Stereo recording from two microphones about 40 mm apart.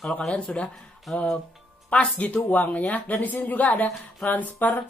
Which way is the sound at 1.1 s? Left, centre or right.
Centre.